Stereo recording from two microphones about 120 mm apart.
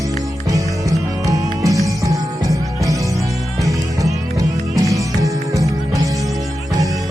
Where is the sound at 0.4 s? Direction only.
30° right (ahead or behind).